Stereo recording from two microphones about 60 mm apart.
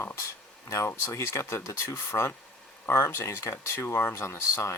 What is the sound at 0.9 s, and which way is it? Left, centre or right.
Speech, left.